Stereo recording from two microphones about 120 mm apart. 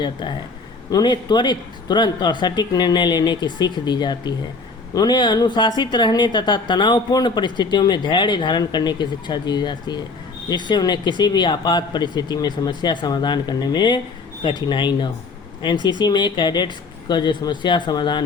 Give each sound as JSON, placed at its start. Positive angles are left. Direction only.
{"t": 0.0, "sound": "a woman's voice", "side_deg": 40}